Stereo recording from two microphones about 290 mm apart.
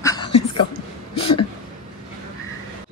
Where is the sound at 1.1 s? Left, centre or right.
Centre.